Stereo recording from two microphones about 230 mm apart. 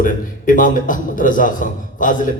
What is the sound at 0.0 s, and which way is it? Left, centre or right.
A man's voice, left.